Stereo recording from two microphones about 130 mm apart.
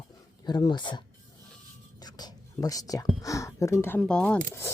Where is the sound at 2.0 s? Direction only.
30° left (ahead or behind); by 4.4 s 10° left (ahead or behind).